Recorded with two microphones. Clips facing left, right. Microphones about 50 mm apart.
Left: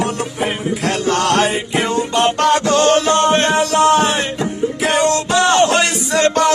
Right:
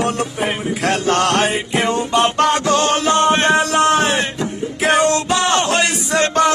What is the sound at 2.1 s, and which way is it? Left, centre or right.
Music, centre.